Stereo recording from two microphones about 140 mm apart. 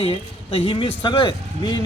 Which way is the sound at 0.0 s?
45° left (ahead or behind).